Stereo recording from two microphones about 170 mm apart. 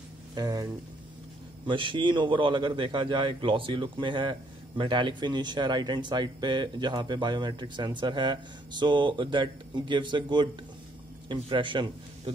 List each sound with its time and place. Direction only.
0.3 s speech: 20° right (ahead or behind)
1.7 s a man's voice: 30° right (ahead or behind)